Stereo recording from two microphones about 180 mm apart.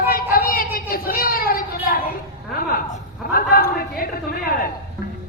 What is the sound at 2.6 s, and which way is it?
A woman's voice, 55° left (ahead or behind).